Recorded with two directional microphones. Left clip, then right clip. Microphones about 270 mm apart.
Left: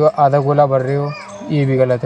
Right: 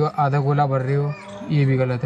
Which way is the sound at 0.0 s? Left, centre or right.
Left.